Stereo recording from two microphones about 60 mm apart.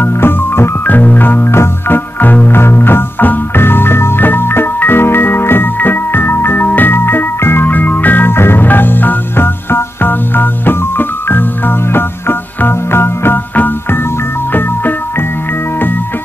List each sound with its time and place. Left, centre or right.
0.0 s music: left